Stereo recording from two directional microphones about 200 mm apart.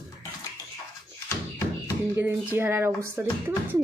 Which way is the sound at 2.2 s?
10° right (ahead or behind).